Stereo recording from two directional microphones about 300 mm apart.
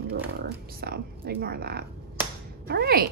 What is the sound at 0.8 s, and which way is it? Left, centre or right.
A woman's voice, right.